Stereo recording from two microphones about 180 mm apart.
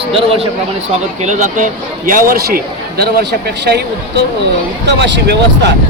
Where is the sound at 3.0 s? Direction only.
65° right (ahead or behind).